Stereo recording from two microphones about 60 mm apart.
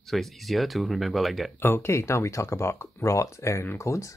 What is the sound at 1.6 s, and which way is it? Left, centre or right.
Speech, left.